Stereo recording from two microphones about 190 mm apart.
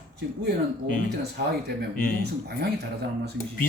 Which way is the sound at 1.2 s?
60° right (ahead or behind).